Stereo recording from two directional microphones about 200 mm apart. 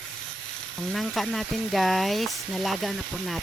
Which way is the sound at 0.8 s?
Centre (ahead or behind).